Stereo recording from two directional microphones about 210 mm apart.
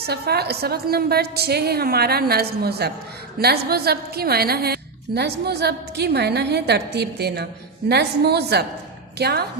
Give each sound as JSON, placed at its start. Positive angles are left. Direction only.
{"t": 0.0, "sound": "a woman's voice", "side_deg": -50}